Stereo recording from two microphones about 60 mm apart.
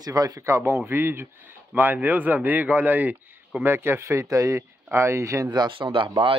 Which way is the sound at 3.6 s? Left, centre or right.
Right.